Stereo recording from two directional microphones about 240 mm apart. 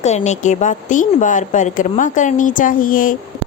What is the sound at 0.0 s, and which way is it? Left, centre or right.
A woman's voice, left.